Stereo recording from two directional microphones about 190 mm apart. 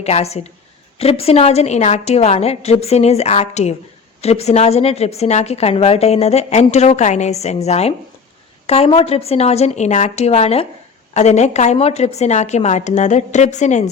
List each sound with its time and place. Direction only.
0.0 s a woman's voice: 35° left (ahead or behind)